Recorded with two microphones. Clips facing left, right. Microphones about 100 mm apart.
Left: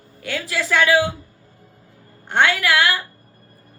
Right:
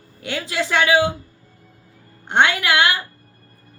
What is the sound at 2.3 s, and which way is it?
Speech, 20° right (ahead or behind).